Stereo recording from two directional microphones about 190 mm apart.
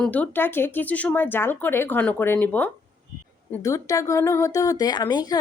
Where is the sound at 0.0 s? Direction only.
10° left (ahead or behind).